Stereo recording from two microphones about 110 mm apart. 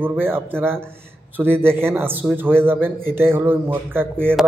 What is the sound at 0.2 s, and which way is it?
A man's voice, 20° right (ahead or behind).